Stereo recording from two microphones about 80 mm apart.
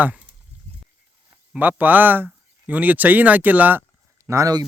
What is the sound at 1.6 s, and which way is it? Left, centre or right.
Speech, right.